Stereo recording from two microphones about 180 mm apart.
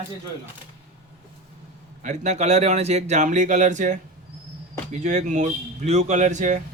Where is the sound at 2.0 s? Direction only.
40° right (ahead or behind).